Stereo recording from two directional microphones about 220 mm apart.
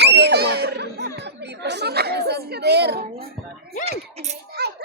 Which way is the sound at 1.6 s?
50° right (ahead or behind).